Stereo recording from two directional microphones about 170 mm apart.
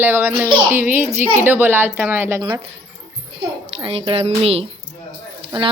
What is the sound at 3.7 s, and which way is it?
Speech, 30° right (ahead or behind).